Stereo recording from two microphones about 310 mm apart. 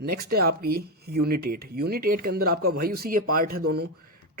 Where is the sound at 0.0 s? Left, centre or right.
Right.